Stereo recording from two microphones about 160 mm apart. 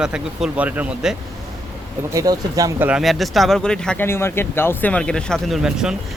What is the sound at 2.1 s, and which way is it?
Speech, 20° right (ahead or behind).